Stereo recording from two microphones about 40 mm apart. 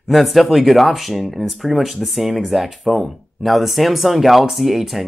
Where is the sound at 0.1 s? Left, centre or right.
Centre.